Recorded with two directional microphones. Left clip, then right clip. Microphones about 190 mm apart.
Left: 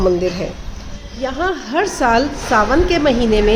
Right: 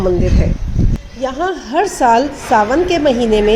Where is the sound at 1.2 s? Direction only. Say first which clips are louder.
Right 1 dB; 15° right (ahead or behind).